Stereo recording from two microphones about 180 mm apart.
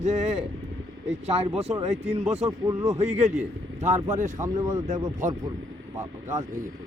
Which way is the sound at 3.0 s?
35° right (ahead or behind).